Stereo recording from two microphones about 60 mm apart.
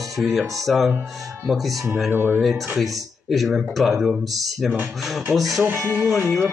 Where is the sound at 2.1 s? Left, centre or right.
Right.